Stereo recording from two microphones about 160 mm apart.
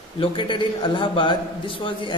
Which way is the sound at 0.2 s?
30° left (ahead or behind).